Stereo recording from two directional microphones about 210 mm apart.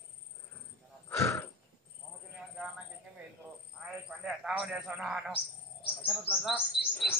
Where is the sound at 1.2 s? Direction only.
10° left (ahead or behind).